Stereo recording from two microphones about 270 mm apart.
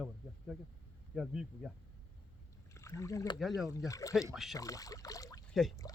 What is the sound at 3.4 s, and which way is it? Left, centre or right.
Speech, centre.